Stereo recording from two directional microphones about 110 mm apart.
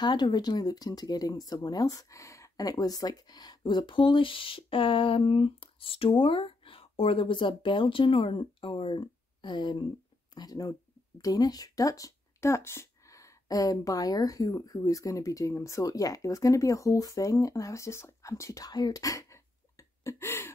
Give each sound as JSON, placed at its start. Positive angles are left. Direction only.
{"t": 0.0, "sound": "speech", "side_deg": 40}